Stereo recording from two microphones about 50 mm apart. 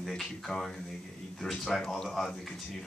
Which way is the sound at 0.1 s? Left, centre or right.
Centre.